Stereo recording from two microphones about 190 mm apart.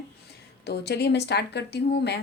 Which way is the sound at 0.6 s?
60° left (ahead or behind).